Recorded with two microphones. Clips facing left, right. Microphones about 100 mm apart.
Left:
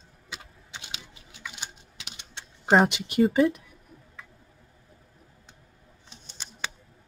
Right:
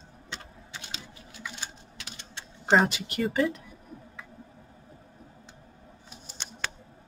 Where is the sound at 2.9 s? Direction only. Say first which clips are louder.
Left 8 dB; 20° left (ahead or behind).